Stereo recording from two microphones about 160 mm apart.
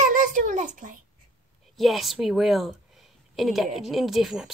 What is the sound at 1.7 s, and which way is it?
A woman's voice, centre (ahead or behind).